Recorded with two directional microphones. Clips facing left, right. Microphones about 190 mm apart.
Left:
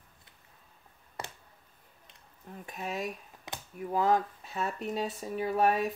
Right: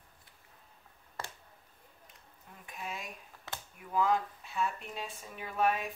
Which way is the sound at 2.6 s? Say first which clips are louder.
Left 7 dB; 40° left (ahead or behind).